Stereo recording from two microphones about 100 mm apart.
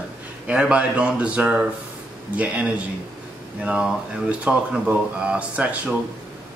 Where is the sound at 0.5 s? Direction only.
10° right (ahead or behind).